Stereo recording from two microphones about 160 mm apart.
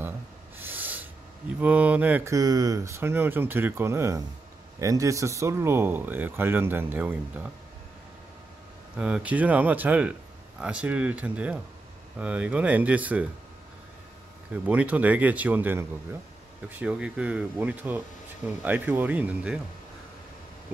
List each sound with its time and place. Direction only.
0.6 s a sound: 10° right (ahead or behind)
1.6 s speech: 10° right (ahead or behind)
2.3 s speech: 25° right (ahead or behind)
8.9 s speech: 5° right (ahead or behind)
14.7 s speech: 10° right (ahead or behind)